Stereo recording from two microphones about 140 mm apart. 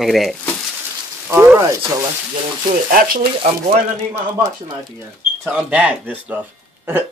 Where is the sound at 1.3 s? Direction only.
20° right (ahead or behind).